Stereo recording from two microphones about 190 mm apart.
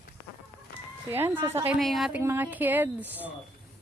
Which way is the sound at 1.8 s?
Centre (ahead or behind).